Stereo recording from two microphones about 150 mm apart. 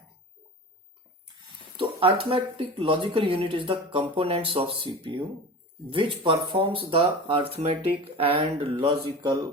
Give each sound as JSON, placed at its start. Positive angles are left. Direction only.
{"t": 1.7, "sound": "speech", "side_deg": -35}
{"t": 9.2, "sound": "speech", "side_deg": -25}